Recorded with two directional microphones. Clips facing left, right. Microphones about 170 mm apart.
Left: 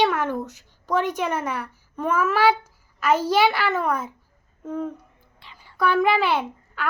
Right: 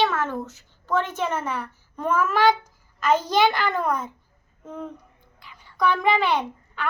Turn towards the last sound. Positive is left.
turn(degrees=5)  # may be behind; listen again after turning